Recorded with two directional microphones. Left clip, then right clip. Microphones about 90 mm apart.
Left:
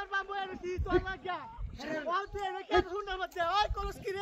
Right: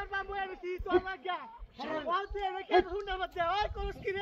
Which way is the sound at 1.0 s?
30° left (ahead or behind).